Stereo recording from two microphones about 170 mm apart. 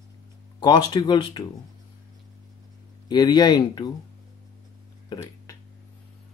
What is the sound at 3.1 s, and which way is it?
Speech, 25° left (ahead or behind).